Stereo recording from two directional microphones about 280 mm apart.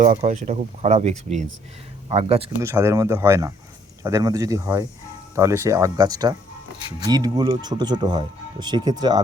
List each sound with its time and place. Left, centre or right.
0.0 s speech: right